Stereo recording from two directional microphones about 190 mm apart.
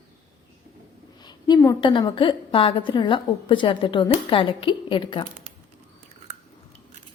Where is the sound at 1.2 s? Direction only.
25° left (ahead or behind).